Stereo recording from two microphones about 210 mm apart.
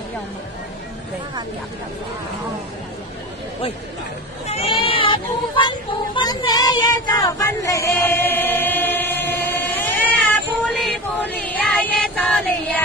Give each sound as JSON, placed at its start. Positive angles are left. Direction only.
{"t": 4.5, "sound": "speech", "side_deg": 30}
{"t": 4.8, "sound": "female singing", "side_deg": 25}
{"t": 10.8, "sound": "music", "side_deg": 5}